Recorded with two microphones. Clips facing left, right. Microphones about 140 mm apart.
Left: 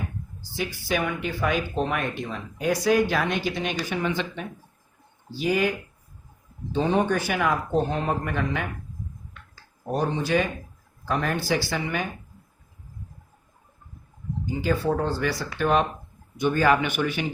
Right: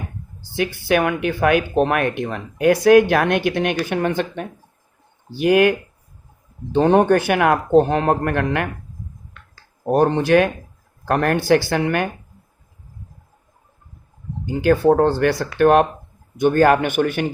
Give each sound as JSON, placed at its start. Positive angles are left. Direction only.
{"t": 0.5, "sound": "speech", "side_deg": -65}
{"t": 5.4, "sound": "speech", "side_deg": -65}
{"t": 6.7, "sound": "speech", "side_deg": -60}
{"t": 9.8, "sound": "speech", "side_deg": -65}
{"t": 14.4, "sound": "speech", "side_deg": -65}